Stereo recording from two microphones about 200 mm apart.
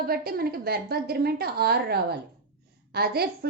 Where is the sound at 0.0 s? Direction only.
50° right (ahead or behind).